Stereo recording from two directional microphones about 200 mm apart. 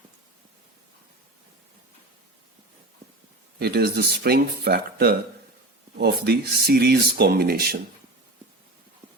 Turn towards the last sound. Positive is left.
turn(degrees=-50)  # may be behind; listen again after turning